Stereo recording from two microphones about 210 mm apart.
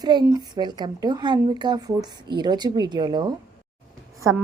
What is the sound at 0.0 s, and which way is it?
A woman's voice, 20° right (ahead or behind).